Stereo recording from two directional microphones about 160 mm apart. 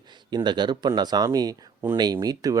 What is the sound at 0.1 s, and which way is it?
Speech, 30° right (ahead or behind).